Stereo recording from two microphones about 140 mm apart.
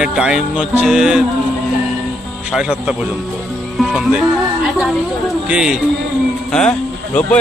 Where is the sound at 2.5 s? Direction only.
5° right (ahead or behind).